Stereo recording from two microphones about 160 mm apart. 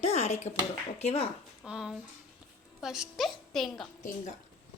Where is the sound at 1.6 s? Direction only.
5° right (ahead or behind).